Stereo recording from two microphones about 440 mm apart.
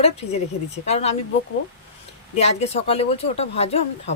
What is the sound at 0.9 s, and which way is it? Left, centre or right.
Speech, centre.